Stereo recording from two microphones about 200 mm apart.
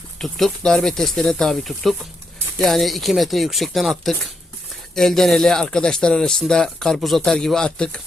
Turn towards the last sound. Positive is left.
turn(degrees=5)  # may be behind; listen again after turning